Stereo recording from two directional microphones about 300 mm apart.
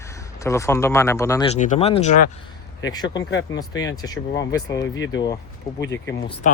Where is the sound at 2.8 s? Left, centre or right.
Centre.